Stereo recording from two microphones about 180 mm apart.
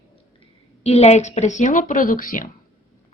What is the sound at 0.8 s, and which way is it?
Speech, 35° left (ahead or behind).